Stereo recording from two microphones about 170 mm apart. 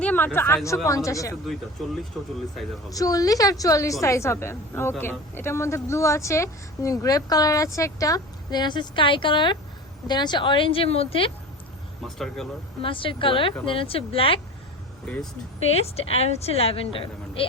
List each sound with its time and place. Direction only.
0.0 s a sound: 10° left (ahead or behind)
0.3 s a woman's voice: 15° left (ahead or behind)
2.9 s a woman's voice: 20° left (ahead or behind)
12.0 s speech: centre (ahead or behind)
12.8 s a woman's voice: 30° left (ahead or behind)
15.0 s speech: 5° left (ahead or behind)
15.6 s a woman's voice: 35° left (ahead or behind)